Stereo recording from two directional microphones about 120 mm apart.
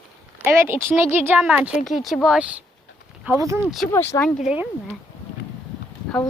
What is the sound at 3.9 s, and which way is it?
Speech, 20° left (ahead or behind).